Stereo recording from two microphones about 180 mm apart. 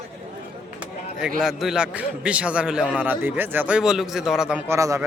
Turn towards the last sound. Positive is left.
turn(degrees=-15)  # may be behind; listen again after turning